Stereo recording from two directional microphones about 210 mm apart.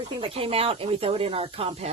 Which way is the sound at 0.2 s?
25° right (ahead or behind).